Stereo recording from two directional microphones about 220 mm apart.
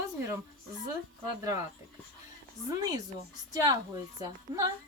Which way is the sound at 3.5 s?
15° right (ahead or behind).